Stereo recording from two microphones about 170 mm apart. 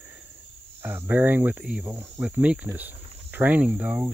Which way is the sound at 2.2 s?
5° right (ahead or behind).